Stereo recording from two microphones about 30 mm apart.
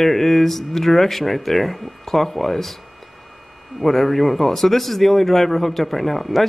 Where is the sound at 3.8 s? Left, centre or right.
Centre.